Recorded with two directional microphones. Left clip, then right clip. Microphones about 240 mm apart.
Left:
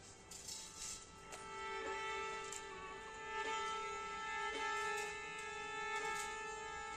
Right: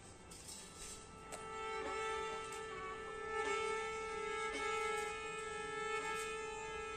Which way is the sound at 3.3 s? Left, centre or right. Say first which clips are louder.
Right 2 dB; right.